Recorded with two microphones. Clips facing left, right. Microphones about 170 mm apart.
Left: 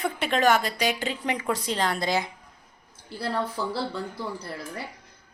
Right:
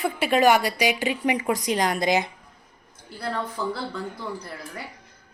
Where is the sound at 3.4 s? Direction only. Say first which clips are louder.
Right 1 dB; 40° left (ahead or behind).